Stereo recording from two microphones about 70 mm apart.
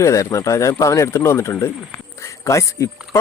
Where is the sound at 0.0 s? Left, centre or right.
Left.